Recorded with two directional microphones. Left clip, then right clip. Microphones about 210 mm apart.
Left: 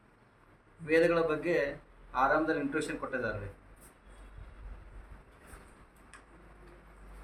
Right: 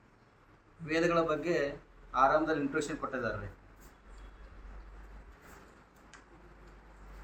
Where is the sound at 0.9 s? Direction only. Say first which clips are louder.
Left 3 dB; 15° left (ahead or behind).